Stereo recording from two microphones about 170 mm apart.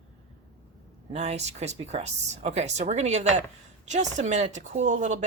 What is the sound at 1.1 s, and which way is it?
Speech, 40° right (ahead or behind).